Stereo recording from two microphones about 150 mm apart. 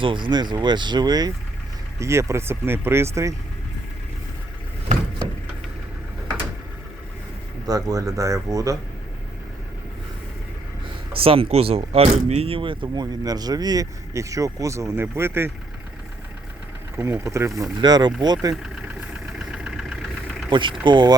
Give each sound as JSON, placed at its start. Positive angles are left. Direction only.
{"t": 0.0, "sound": "speech", "side_deg": -35}
{"t": 7.7, "sound": "speech", "side_deg": -25}
{"t": 11.1, "sound": "speech", "side_deg": -40}
{"t": 17.0, "sound": "speech", "side_deg": -15}
{"t": 19.5, "sound": "vehicle", "side_deg": -5}
{"t": 20.5, "sound": "speech", "side_deg": -35}